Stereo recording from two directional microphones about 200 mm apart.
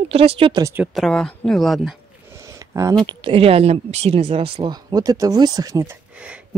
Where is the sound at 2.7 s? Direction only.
15° right (ahead or behind).